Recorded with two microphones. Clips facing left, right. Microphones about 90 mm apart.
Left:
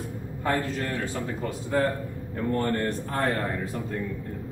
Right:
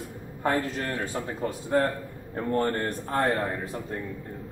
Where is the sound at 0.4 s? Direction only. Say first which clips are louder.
Right 1 dB; 30° right (ahead or behind).